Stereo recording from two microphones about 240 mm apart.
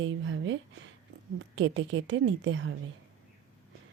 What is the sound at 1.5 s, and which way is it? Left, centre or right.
Speech, right.